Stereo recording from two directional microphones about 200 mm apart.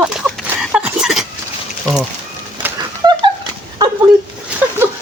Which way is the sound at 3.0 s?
20° right (ahead or behind).